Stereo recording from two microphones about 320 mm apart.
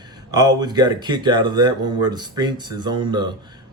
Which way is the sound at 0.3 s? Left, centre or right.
Centre.